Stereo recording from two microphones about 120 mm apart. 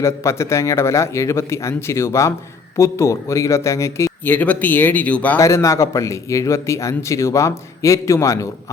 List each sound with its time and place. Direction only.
0.0 s a man's voice: 25° left (ahead or behind)
5.4 s a man's voice: 25° left (ahead or behind)